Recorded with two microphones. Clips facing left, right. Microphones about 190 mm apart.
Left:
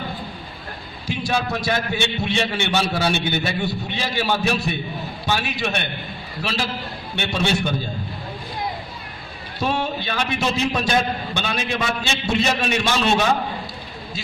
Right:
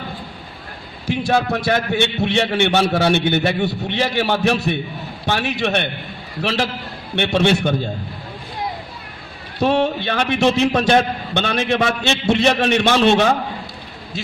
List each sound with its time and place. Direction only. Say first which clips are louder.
1.2 s a man's voice: right 5 dB; 60° right (ahead or behind)
7.2 s a man's voice: right 6 dB; 60° right (ahead or behind)
9.6 s a man's voice: right 6 dB; 65° right (ahead or behind)